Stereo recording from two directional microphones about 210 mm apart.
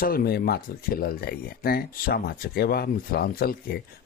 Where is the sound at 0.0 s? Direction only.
45° left (ahead or behind).